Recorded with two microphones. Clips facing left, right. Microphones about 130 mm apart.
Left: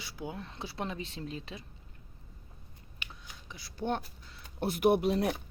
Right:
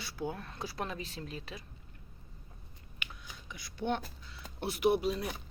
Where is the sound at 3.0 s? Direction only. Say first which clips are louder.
Right 1 dB; 30° left (ahead or behind).